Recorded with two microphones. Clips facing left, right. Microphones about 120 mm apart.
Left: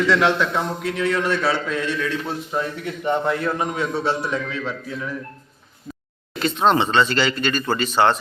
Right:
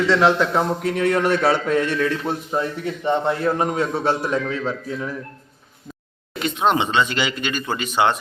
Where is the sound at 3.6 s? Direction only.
45° right (ahead or behind).